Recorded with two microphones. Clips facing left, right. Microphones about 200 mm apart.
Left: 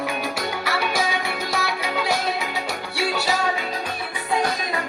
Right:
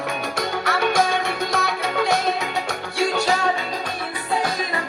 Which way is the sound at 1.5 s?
Centre (ahead or behind).